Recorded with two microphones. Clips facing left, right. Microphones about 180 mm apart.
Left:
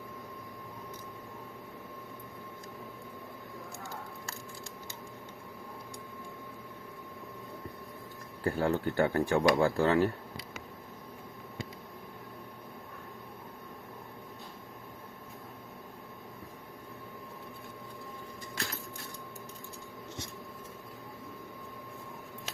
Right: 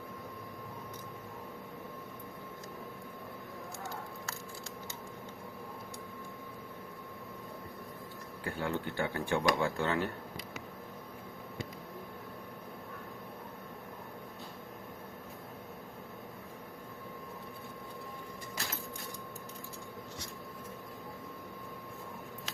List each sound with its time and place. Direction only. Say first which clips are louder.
8.4 s speech: left 7 dB; 40° left (ahead or behind)